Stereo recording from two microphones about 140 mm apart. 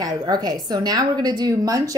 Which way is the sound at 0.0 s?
30° right (ahead or behind).